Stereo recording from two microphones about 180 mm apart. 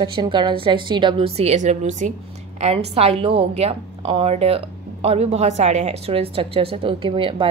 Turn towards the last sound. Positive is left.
turn(degrees=-30)  # may be behind; listen again after turning